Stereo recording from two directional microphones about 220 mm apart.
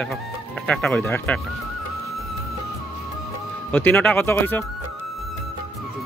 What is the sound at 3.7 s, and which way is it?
Speech, 5° left (ahead or behind).